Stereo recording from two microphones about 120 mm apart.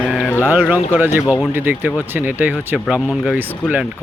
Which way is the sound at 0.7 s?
15° right (ahead or behind).